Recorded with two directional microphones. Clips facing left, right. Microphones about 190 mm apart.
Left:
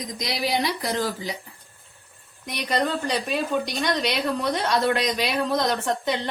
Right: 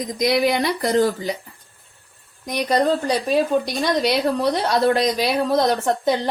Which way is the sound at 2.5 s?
40° right (ahead or behind).